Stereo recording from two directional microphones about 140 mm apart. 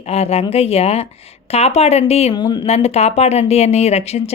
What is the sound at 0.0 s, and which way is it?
A woman's voice, 45° left (ahead or behind).